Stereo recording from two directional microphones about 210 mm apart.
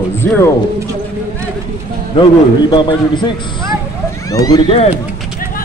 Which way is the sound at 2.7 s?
20° left (ahead or behind).